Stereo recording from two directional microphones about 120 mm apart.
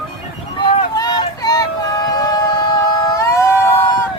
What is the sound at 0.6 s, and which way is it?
Vehicle, 35° left (ahead or behind).